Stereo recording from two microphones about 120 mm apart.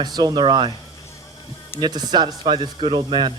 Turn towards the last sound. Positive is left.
turn(degrees=-40)  # may be behind; listen again after turning